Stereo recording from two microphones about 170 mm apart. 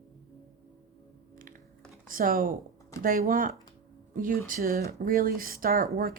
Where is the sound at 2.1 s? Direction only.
55° right (ahead or behind).